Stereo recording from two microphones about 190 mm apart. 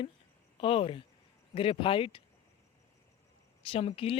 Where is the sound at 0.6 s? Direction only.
30° left (ahead or behind).